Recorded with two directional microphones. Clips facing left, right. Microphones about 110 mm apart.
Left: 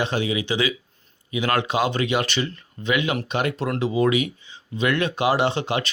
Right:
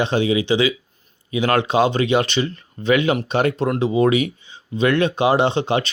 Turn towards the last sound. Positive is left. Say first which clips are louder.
# right 4 dB
turn(degrees=-30)  # may be behind; listen again after turning